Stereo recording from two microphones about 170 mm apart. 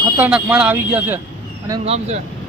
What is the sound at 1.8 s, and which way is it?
Speech, 40° right (ahead or behind).